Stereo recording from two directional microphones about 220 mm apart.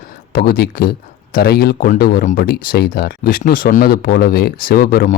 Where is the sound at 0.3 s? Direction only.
45° left (ahead or behind).